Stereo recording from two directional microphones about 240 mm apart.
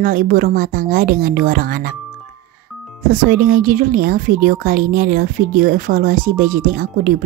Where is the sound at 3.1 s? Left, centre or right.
Right.